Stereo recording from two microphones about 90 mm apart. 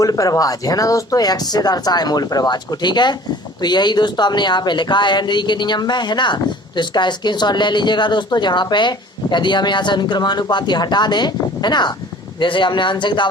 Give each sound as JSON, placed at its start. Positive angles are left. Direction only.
{"t": 0.0, "sound": "speech", "side_deg": 40}